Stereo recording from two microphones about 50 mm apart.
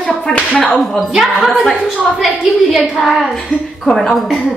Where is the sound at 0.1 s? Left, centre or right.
Left.